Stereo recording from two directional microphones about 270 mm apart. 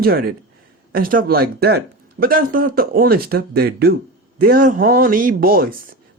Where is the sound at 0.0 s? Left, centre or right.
Right.